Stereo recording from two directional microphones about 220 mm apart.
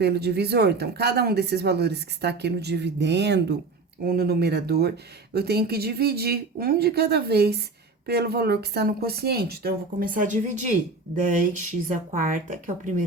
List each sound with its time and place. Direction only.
0.0 s speech: 50° right (ahead or behind)